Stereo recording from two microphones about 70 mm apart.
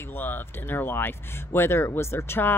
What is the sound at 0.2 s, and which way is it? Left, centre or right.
Speech, left.